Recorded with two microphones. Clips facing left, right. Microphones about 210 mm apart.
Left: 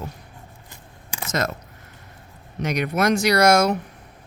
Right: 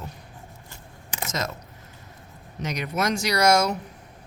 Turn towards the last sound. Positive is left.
turn(degrees=55)  # may be behind; listen again after turning